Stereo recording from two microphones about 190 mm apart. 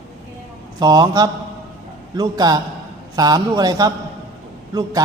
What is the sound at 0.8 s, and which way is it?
A man's voice, 20° right (ahead or behind).